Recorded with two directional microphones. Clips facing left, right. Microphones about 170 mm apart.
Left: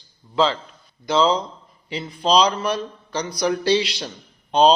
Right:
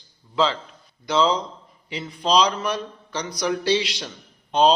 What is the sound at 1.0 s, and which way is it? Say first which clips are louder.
A man's voice: left 2 dB; 30° left (ahead or behind).